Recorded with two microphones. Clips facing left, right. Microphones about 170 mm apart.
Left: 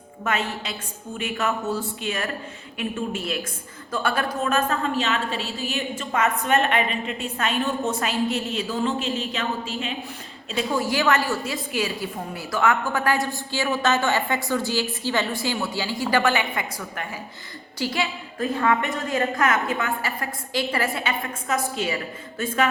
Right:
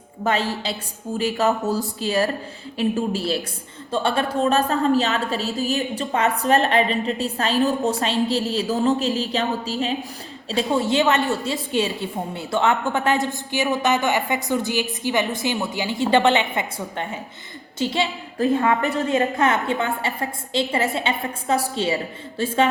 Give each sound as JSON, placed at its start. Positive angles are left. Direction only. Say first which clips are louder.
{"t": 0.3, "sound": "a woman's voice", "louder": "right 4 dB", "side_deg": -30}
{"t": 18.8, "sound": "a woman's voice", "louder": "right 5 dB", "side_deg": -35}
{"t": 19.0, "sound": "a woman's voice", "louder": "right 2 dB", "side_deg": -20}